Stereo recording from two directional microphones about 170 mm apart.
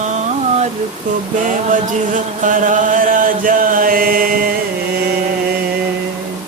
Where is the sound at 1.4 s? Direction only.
50° right (ahead or behind).